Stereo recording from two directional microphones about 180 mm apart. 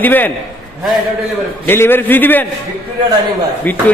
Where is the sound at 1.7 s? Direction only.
10° left (ahead or behind).